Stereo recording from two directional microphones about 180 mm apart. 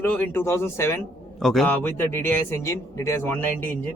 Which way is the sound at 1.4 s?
Centre (ahead or behind).